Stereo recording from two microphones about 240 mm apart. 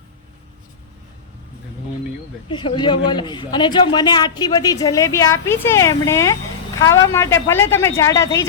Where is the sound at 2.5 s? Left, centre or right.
Centre.